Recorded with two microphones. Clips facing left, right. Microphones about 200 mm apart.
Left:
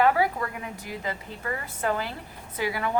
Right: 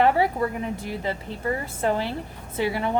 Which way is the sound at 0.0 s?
25° right (ahead or behind).